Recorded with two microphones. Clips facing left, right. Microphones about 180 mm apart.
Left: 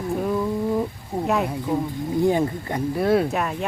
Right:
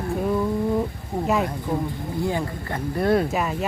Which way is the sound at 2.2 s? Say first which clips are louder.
Left 6 dB; 20° left (ahead or behind).